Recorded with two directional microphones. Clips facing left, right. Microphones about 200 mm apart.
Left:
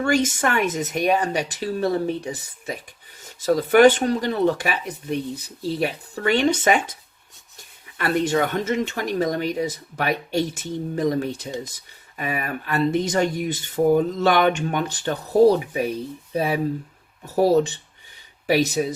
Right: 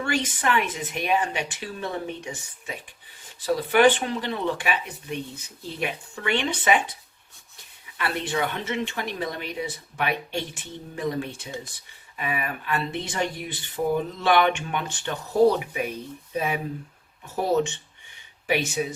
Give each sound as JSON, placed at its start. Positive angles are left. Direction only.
{"t": 0.0, "sound": "speech", "side_deg": 45}
{"t": 7.9, "sound": "speech", "side_deg": 45}